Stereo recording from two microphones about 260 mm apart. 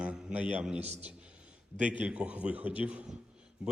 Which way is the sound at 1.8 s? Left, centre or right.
Centre.